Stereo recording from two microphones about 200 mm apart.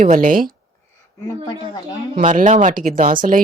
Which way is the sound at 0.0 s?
40° right (ahead or behind).